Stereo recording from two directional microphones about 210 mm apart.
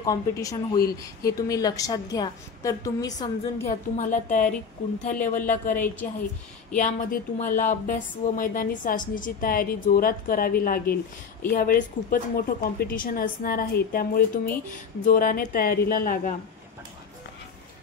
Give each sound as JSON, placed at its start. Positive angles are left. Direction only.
{"t": 0.0, "sound": "a woman's voice", "side_deg": 15}
{"t": 3.6, "sound": "a woman's voice", "side_deg": 35}